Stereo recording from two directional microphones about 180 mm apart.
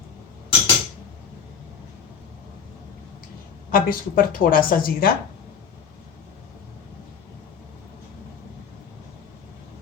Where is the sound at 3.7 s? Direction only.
55° left (ahead or behind).